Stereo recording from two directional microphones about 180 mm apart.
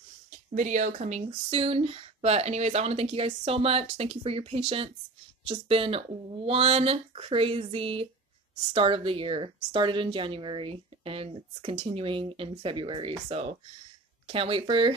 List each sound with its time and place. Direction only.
0.6 s speech: 40° right (ahead or behind)